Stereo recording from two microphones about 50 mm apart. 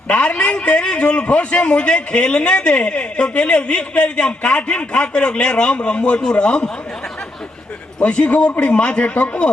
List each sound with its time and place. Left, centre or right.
0.1 s a man's voice: left
7.9 s a man's voice: left